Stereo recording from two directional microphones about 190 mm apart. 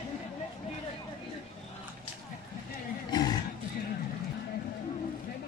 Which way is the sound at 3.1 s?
20° left (ahead or behind).